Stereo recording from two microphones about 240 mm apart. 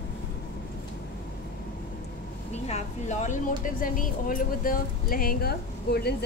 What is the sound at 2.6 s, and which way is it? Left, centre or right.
Speech, left.